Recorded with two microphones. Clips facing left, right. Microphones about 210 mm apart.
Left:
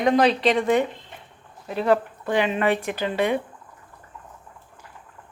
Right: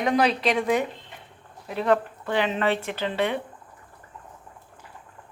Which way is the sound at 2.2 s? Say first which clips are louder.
Left 2 dB; 10° left (ahead or behind).